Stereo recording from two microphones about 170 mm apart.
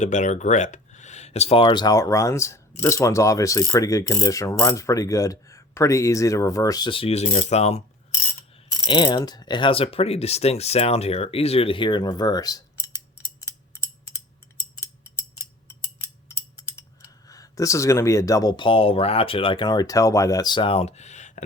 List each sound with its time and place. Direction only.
0.0 s speech: 45° left (ahead or behind)
8.9 s speech: 30° left (ahead or behind)
17.2 s speech: 20° left (ahead or behind); by 21.4 s 45° left (ahead or behind)